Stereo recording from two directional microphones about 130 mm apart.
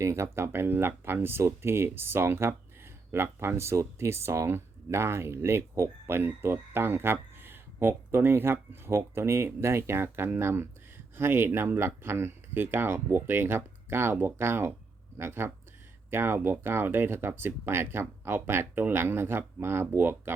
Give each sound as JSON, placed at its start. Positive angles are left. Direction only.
{"t": 0.0, "sound": "speech", "side_deg": -20}